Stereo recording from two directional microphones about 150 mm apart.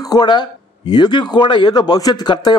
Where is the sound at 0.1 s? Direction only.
30° left (ahead or behind).